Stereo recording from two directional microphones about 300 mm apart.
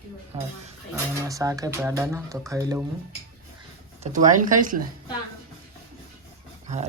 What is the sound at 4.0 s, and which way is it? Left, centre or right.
Speech, right.